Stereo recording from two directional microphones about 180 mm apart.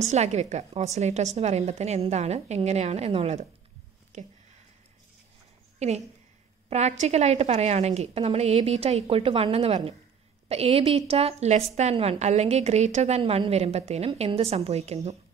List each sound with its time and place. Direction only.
0.0 s a woman's voice: 40° right (ahead or behind)
5.8 s a woman's voice: 40° right (ahead or behind)